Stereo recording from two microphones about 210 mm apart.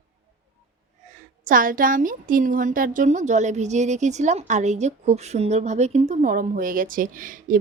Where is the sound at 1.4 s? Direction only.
40° right (ahead or behind).